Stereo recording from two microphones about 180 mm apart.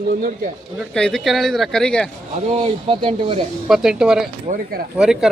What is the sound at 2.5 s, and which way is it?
Speech, 30° right (ahead or behind).